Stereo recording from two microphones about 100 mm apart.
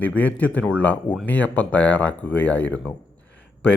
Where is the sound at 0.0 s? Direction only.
15° left (ahead or behind).